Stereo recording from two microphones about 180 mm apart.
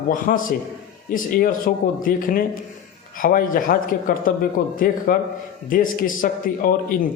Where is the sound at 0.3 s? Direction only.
50° left (ahead or behind).